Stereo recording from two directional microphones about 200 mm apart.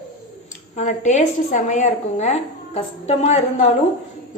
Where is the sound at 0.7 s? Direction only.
35° left (ahead or behind).